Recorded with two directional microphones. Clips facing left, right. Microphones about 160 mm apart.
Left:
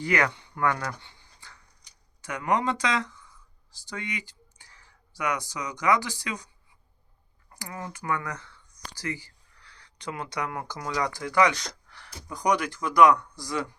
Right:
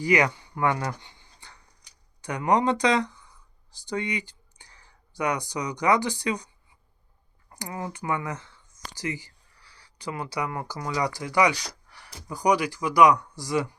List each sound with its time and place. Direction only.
0.0 s speech: 15° right (ahead or behind)
2.5 s speech: 35° right (ahead or behind)
7.5 s speech: 25° right (ahead or behind)